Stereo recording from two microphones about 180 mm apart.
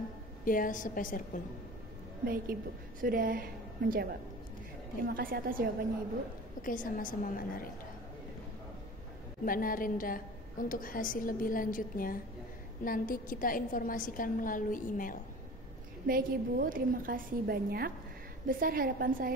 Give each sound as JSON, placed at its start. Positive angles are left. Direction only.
{"t": 0.5, "sound": "a woman's voice", "side_deg": 50}
{"t": 2.2, "sound": "a woman's voice", "side_deg": -55}
{"t": 6.6, "sound": "a woman's voice", "side_deg": 50}
{"t": 9.4, "sound": "a woman's voice", "side_deg": 50}
{"t": 16.1, "sound": "a woman's voice", "side_deg": -50}